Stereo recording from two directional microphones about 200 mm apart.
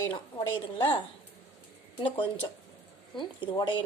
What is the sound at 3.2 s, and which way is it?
Speech, 25° left (ahead or behind).